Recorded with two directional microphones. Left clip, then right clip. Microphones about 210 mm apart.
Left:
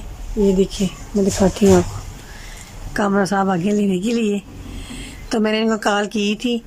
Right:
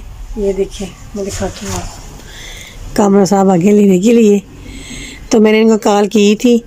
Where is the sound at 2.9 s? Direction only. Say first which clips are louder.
Right 8 dB; 15° right (ahead or behind).